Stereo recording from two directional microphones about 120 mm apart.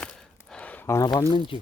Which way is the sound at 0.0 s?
5° left (ahead or behind).